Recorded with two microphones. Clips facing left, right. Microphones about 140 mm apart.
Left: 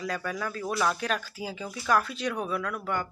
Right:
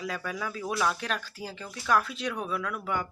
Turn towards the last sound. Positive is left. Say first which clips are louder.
# left 1 dB
turn(degrees=-5)  # may be behind; listen again after turning